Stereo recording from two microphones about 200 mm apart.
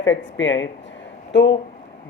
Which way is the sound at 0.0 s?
65° left (ahead or behind).